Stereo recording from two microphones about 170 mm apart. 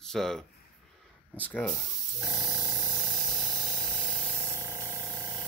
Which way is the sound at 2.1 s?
15° right (ahead or behind).